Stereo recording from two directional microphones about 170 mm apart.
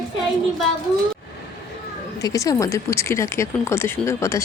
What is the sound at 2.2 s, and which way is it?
Speech, 20° left (ahead or behind).